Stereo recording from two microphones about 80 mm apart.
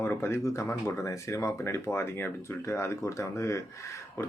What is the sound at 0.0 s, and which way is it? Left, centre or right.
Speech, left.